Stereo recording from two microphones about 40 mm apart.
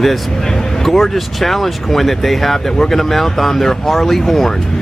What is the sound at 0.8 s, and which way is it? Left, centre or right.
Speech, centre.